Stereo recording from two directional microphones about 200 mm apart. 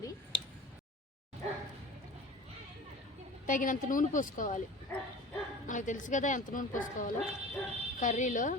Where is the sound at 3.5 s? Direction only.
40° left (ahead or behind).